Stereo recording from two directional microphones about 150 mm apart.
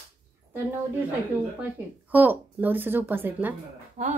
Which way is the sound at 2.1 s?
10° right (ahead or behind).